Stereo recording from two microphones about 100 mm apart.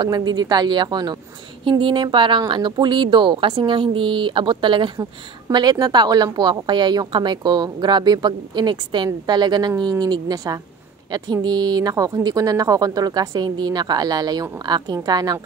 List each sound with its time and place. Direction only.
0.0 s a woman's voice: 45° right (ahead or behind)
1.6 s a woman's voice: 55° right (ahead or behind)